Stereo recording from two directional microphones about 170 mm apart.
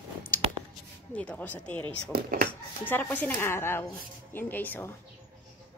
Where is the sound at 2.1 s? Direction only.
60° right (ahead or behind).